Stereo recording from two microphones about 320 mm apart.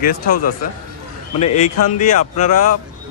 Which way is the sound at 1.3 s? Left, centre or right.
Centre.